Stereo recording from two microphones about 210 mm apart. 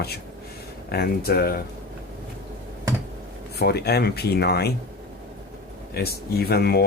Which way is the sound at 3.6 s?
50° left (ahead or behind).